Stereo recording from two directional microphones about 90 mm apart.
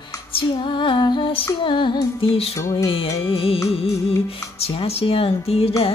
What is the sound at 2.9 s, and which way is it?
Speech, 90° left.